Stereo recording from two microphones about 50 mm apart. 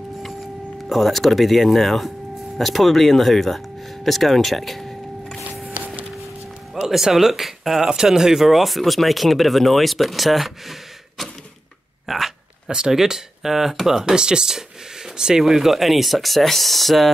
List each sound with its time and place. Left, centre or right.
0.8 s speech: centre
5.7 s a sound: right
6.7 s speech: centre